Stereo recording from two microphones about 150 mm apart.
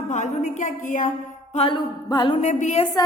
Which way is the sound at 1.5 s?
40° left (ahead or behind).